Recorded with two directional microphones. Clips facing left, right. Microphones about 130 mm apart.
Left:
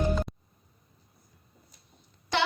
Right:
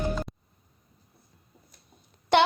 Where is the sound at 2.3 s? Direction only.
55° right (ahead or behind).